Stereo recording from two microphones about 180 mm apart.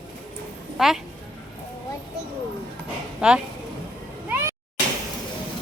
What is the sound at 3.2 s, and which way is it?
Speech, 5° right (ahead or behind).